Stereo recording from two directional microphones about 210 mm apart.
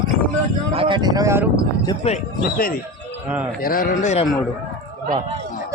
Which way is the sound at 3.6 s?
45° left (ahead or behind).